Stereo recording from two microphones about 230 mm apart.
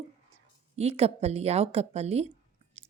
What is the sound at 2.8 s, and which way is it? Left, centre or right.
Chewing, right.